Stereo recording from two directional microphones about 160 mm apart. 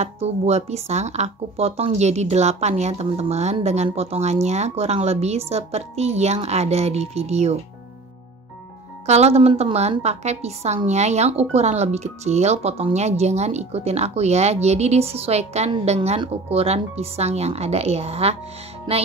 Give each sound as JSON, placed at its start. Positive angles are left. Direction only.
{"t": 0.0, "sound": "speech", "side_deg": -40}
{"t": 9.0, "sound": "speech", "side_deg": -45}